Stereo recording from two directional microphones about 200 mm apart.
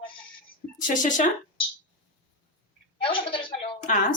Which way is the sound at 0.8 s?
40° left (ahead or behind).